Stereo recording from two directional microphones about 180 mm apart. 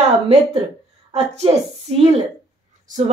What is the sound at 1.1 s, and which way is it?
Female singing, 35° right (ahead or behind).